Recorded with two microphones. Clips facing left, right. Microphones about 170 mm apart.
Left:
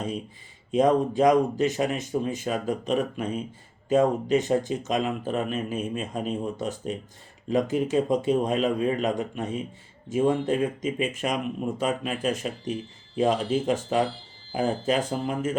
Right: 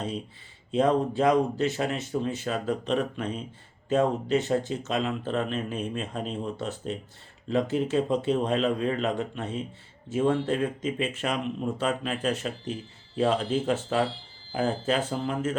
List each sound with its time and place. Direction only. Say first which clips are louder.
0.7 s speech: left 2 dB; 15° left (ahead or behind)